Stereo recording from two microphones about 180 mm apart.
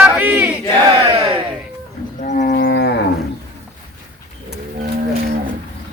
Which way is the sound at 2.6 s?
70° left (ahead or behind).